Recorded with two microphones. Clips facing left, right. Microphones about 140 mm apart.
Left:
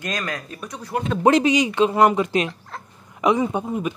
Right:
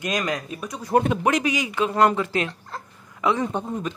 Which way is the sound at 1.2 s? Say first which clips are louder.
Left 6 dB; 25° left (ahead or behind).